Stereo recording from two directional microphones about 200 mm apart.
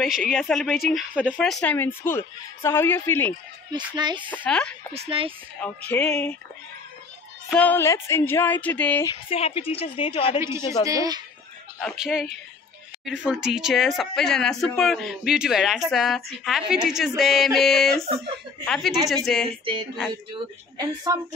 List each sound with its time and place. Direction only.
0.3 s speech: centre (ahead or behind)
3.7 s a woman's voice: 20° right (ahead or behind)
4.3 s speech: 5° left (ahead or behind)
4.9 s a woman's voice: 30° right (ahead or behind)
5.6 s speech: 10° left (ahead or behind)
7.4 s speech: 5° left (ahead or behind)
9.0 s a woman's voice: 25° left (ahead or behind)
10.9 s a woman's voice: 20° right (ahead or behind)
11.8 s speech: centre (ahead or behind)
19.6 s a woman's voice: 25° right (ahead or behind)